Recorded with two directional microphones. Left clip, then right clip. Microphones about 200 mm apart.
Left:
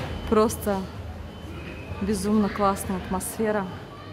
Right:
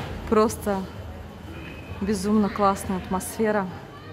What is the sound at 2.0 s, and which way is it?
A woman's voice, 10° right (ahead or behind).